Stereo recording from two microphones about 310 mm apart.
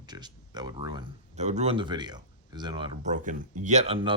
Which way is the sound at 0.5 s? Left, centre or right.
Centre.